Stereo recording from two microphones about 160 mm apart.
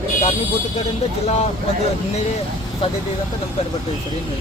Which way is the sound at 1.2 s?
40° left (ahead or behind).